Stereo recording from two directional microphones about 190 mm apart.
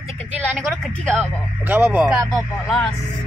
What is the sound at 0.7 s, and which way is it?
Speech, 5° left (ahead or behind).